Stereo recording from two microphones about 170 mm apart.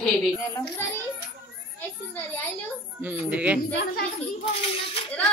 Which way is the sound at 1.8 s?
10° left (ahead or behind).